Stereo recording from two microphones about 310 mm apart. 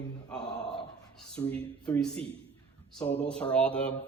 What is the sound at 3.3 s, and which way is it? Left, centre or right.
Speech, centre.